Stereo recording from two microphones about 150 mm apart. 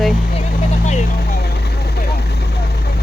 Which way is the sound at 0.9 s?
55° left (ahead or behind).